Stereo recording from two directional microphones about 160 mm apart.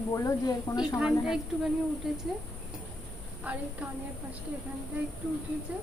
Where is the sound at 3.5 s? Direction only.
10° right (ahead or behind).